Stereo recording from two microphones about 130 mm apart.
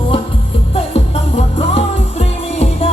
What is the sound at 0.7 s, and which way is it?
Music, 50° left (ahead or behind).